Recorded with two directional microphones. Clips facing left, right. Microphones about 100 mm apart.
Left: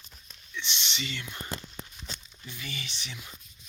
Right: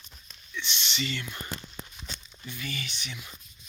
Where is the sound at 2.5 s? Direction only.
25° left (ahead or behind).